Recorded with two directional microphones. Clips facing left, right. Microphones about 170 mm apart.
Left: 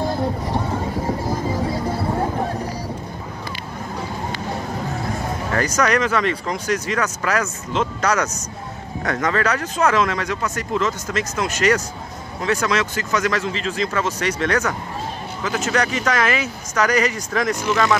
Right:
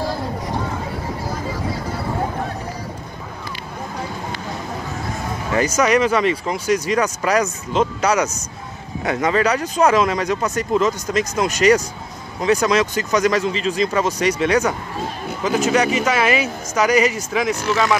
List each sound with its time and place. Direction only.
5.5 s speech: 10° right (ahead or behind)